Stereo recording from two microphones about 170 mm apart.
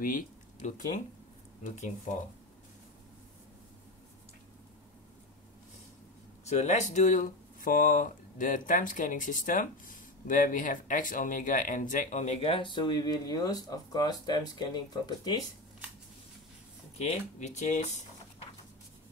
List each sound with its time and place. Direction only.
0.0 s speech: 55° left (ahead or behind)
6.4 s speech: 40° left (ahead or behind); by 15.4 s 25° left (ahead or behind)
16.9 s speech: 40° left (ahead or behind)